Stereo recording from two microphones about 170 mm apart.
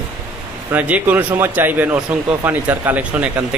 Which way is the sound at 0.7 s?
10° right (ahead or behind).